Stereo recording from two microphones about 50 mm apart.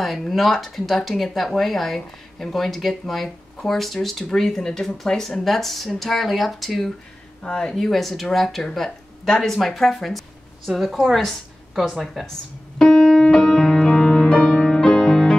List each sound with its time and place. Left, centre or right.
0.0 s speech: centre
7.4 s speech: centre
7.7 s a woman's voice: centre
12.7 s music: centre